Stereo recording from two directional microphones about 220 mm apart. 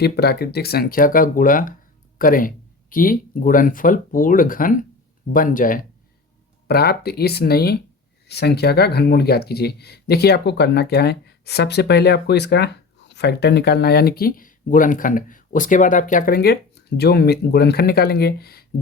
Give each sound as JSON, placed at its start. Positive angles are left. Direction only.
{"t": 0.0, "sound": "speech", "side_deg": 45}